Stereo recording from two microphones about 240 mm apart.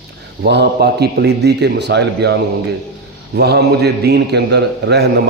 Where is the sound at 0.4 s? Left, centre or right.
Right.